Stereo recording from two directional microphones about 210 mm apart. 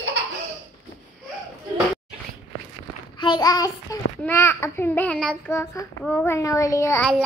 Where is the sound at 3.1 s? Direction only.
20° left (ahead or behind).